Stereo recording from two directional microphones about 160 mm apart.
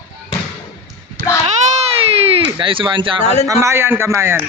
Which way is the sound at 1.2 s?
75° right (ahead or behind).